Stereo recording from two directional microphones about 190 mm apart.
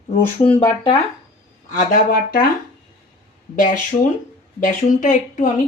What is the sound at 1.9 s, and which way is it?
Speech, 50° left (ahead or behind).